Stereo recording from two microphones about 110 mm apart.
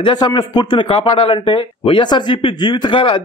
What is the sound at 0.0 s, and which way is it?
A man's voice, 45° left (ahead or behind).